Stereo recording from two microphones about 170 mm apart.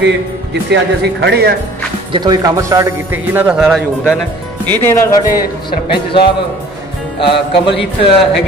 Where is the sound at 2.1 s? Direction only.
25° right (ahead or behind); by 4.1 s centre (ahead or behind).